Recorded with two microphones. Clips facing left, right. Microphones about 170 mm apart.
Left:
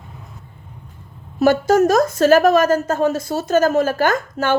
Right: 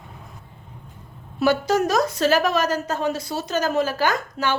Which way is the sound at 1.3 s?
50° left (ahead or behind).